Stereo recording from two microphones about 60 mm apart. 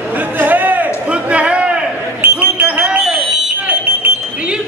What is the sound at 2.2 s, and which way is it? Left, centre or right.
Smoke detector, right.